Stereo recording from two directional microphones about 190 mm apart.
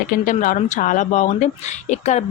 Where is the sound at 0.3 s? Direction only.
45° left (ahead or behind).